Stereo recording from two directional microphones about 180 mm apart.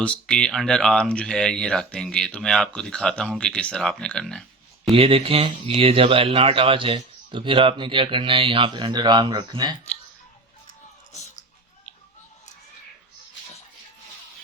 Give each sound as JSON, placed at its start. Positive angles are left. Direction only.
{"t": 0.0, "sound": "speech", "side_deg": 5}
{"t": 4.9, "sound": "speech", "side_deg": -30}
{"t": 10.7, "sound": "chewing", "side_deg": 40}